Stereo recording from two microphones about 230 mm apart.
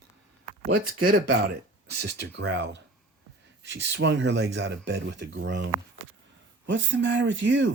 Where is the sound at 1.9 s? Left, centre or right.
Right.